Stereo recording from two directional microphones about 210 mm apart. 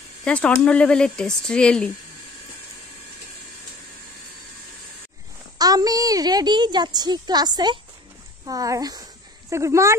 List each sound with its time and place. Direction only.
0.2 s speech: 5° left (ahead or behind)
5.6 s a sound: 15° right (ahead or behind)
8.5 s speech: 15° right (ahead or behind)